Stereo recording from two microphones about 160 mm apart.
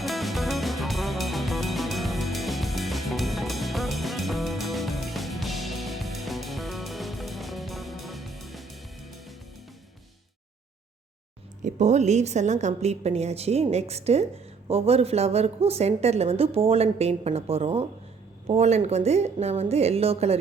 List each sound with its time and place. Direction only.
0.0 s music: centre (ahead or behind)
11.6 s a woman's voice: 45° right (ahead or behind)